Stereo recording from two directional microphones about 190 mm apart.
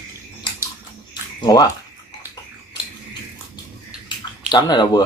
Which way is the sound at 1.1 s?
20° left (ahead or behind).